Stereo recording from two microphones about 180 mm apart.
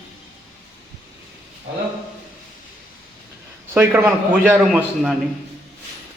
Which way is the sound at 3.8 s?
10° right (ahead or behind).